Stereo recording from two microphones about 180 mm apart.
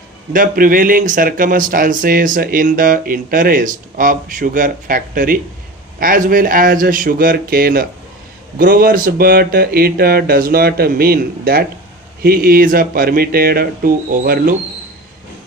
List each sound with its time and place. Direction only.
0.3 s speech: 50° right (ahead or behind)